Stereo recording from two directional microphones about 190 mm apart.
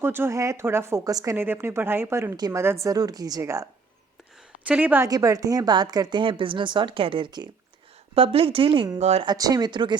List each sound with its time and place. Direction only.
0.0 s a woman's voice: 10° right (ahead or behind); by 9.2 s 35° right (ahead or behind)
9.2 s a woman's voice: 20° right (ahead or behind)